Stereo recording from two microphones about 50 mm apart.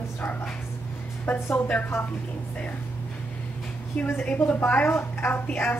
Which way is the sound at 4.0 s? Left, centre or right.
Left.